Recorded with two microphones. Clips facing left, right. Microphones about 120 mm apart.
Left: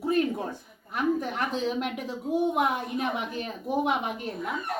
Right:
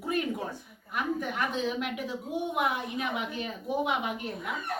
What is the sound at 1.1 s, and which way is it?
A woman's voice, 35° left (ahead or behind).